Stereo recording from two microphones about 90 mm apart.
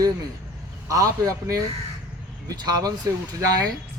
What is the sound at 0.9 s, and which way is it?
Speech, 40° right (ahead or behind).